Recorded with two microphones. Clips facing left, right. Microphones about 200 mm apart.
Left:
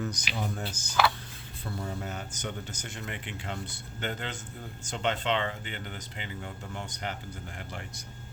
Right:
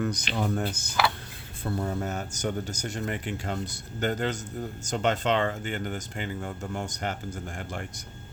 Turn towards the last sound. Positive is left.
turn(degrees=-50)  # may be behind; listen again after turning